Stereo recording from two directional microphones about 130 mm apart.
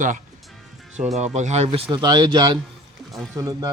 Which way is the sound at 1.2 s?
60° right (ahead or behind).